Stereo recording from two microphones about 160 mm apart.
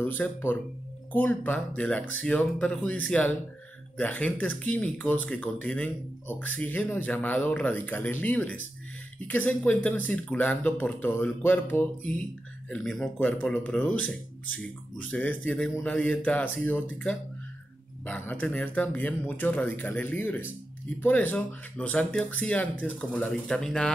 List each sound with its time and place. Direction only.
0.0 s speech: 10° left (ahead or behind)